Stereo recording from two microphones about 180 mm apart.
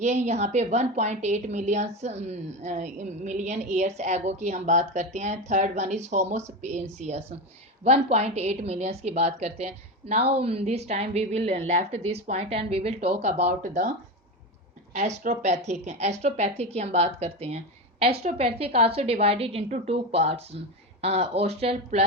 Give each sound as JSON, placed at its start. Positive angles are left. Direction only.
{"t": 0.0, "sound": "a woman's voice", "side_deg": -40}
{"t": 13.4, "sound": "speech", "side_deg": -50}
{"t": 14.9, "sound": "a woman's voice", "side_deg": -40}